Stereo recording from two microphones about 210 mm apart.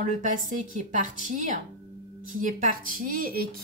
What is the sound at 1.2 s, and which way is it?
A woman's voice, 35° right (ahead or behind).